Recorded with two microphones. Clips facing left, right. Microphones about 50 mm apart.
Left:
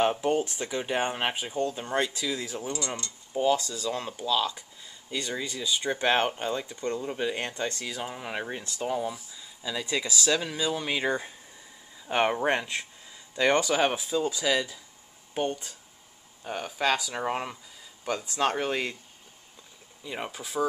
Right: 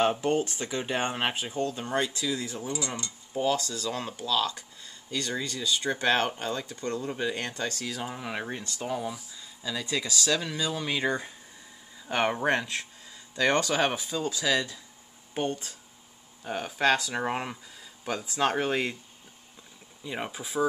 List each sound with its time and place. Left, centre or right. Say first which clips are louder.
0.0 s speech: even; centre
7.8 s speech: even; centre
20.0 s speech: right 1 dB; centre